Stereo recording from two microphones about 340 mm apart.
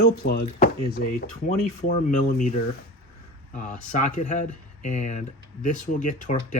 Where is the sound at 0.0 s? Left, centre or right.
Left.